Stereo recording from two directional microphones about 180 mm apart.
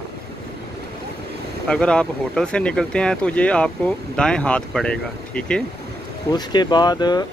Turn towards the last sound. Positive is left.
turn(degrees=25)  # may be behind; listen again after turning